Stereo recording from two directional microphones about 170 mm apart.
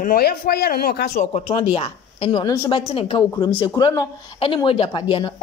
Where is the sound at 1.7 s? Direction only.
30° left (ahead or behind).